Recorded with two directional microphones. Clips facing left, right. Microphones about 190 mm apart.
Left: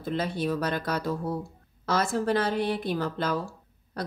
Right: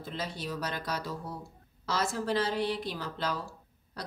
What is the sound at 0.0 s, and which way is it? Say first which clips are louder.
Speech: left 9 dB; 55° left (ahead or behind).